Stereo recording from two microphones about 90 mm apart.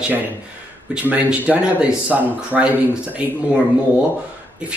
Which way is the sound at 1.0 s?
15° right (ahead or behind).